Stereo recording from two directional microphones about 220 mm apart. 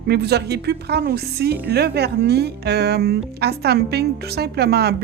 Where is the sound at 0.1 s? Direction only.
50° right (ahead or behind).